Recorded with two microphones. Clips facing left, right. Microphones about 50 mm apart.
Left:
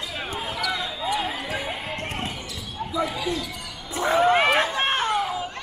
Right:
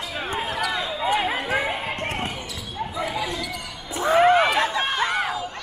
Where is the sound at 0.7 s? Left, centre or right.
Right.